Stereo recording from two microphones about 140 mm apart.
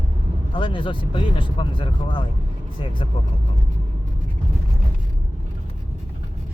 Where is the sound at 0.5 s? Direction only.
35° left (ahead or behind).